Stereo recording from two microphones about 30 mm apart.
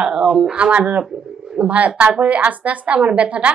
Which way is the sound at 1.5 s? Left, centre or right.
Right.